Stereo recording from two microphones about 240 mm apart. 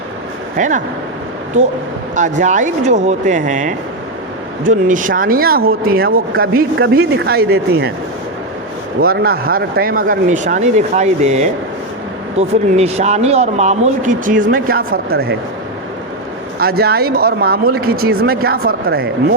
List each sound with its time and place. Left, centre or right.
0.5 s speech: right
2.1 s speech: right
9.0 s a man's voice: right
16.6 s speech: right